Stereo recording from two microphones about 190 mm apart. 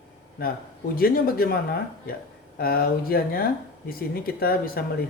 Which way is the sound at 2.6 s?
50° left (ahead or behind).